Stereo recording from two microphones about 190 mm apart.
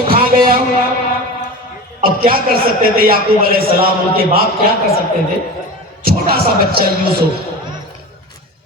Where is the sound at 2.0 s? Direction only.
50° right (ahead or behind).